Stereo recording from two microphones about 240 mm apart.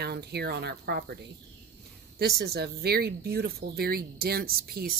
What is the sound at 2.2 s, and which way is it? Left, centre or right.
Speech, right.